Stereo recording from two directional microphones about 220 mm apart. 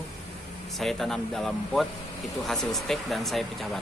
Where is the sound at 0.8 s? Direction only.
Centre (ahead or behind).